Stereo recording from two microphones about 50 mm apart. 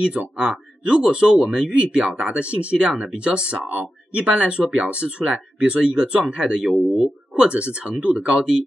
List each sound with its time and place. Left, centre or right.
0.0 s speech: right
6.6 s speech: centre
7.3 s speech: right